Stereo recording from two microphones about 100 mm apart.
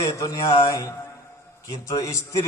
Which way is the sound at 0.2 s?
30° left (ahead or behind).